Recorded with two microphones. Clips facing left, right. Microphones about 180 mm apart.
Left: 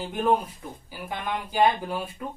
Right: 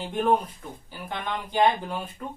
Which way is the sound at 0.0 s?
5° left (ahead or behind).